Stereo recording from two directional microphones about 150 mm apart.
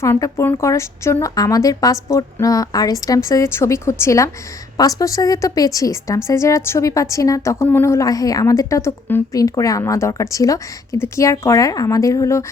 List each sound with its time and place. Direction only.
0.0 s a woman's voice: 20° left (ahead or behind)